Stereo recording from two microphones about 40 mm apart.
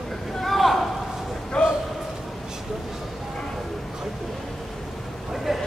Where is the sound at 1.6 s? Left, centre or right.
Centre.